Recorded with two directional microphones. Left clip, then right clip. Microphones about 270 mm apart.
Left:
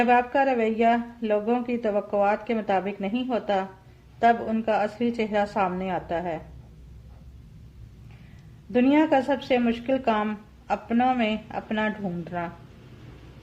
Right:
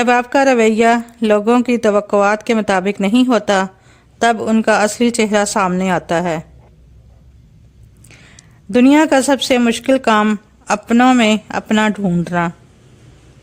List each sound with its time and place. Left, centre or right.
0.0 s speech: right
8.7 s speech: right